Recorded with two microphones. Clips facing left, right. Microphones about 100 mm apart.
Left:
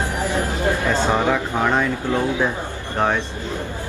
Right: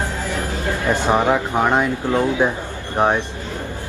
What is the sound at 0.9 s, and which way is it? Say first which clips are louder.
Speech: right 6 dB; 15° right (ahead or behind).